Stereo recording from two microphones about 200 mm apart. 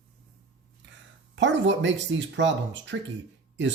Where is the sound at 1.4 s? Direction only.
65° right (ahead or behind).